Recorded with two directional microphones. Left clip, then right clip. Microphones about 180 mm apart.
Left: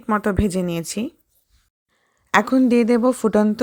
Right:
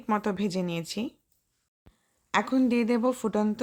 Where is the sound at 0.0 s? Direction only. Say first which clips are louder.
Left 8 dB; 25° left (ahead or behind).